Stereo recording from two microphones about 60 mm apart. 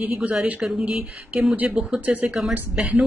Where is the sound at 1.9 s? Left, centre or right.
Right.